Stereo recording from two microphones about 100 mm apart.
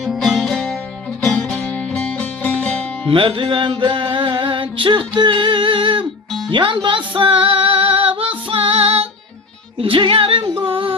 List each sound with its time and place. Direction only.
0.0 s music: centre (ahead or behind)
3.1 s music: 60° right (ahead or behind); by 9.0 s 80° right
9.7 s female singing: 65° right (ahead or behind)